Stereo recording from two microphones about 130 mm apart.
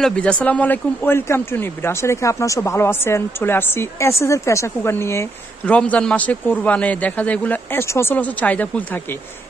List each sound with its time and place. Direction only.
0.0 s speech: 10° left (ahead or behind)
5.8 s speech: 10° left (ahead or behind)